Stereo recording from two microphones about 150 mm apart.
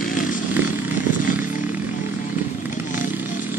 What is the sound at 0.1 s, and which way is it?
Chainsaw, 60° left (ahead or behind).